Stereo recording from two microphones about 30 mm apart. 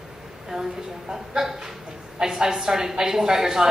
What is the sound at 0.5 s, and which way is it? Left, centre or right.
Speech, right.